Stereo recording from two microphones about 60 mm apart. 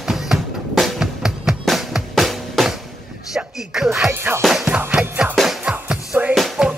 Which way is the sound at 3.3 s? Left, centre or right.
Centre.